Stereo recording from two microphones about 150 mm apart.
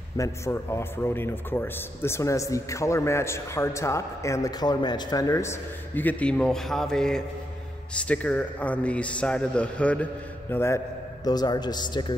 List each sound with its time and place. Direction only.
0.2 s a man's voice: 20° left (ahead or behind)